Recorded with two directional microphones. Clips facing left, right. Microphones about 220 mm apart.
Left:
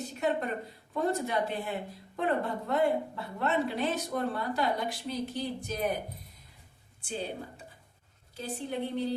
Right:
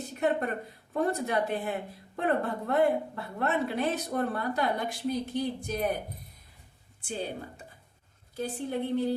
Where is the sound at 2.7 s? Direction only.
55° right (ahead or behind).